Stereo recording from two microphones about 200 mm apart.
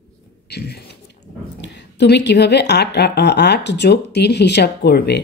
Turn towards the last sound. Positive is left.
turn(degrees=55)  # may be behind; listen again after turning